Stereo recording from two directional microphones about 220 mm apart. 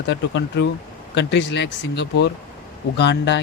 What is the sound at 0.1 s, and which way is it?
Speech, 55° left (ahead or behind).